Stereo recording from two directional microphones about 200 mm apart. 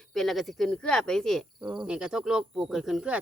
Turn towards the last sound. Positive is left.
turn(degrees=-5)  # may be behind; listen again after turning